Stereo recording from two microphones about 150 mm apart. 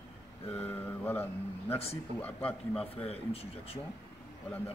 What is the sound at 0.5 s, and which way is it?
Speech, 10° left (ahead or behind).